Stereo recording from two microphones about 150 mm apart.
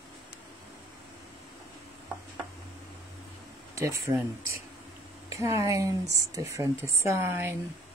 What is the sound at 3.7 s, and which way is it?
Speech, 20° right (ahead or behind).